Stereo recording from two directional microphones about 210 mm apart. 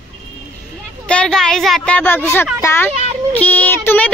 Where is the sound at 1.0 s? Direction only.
5° left (ahead or behind).